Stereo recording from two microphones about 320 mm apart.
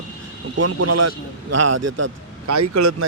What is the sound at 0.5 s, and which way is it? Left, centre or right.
A man's voice, right.